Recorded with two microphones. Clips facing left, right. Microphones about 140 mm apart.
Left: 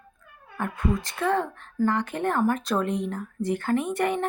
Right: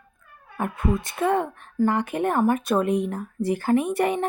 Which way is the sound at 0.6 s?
25° right (ahead or behind).